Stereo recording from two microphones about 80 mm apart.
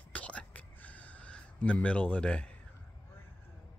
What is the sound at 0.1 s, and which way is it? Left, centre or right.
Whispering, centre.